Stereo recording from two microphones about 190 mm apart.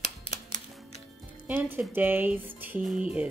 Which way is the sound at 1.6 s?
10° right (ahead or behind).